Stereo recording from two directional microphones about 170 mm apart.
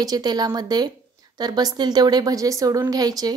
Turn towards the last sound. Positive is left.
turn(degrees=-25)  # may be behind; listen again after turning